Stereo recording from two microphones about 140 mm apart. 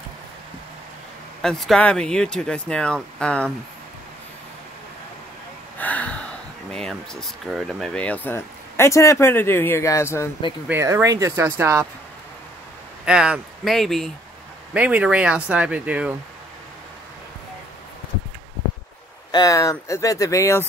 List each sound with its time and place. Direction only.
1.4 s speech: centre (ahead or behind)
5.8 s gasp: 10° left (ahead or behind)
6.7 s speech: 5° left (ahead or behind); by 10.3 s 20° left (ahead or behind)
10.7 s speech: 20° right (ahead or behind)
13.0 s speech: 5° right (ahead or behind)
14.7 s speech: 10° right (ahead or behind)
19.3 s speech: 25° left (ahead or behind)